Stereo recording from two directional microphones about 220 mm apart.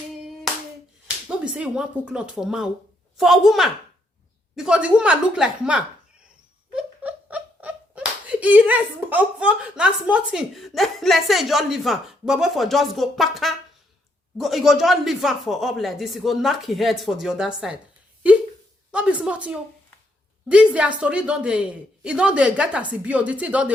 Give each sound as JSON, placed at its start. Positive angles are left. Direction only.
{"t": 1.0, "sound": "speech", "side_deg": -5}
{"t": 18.9, "sound": "speech", "side_deg": -5}